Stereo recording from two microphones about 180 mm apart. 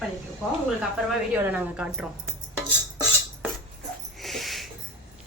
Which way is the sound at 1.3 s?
10° right (ahead or behind).